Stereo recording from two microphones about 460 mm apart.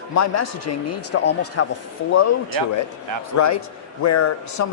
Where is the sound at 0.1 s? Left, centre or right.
Left.